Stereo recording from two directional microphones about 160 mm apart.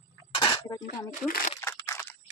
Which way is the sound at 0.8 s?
60° left (ahead or behind).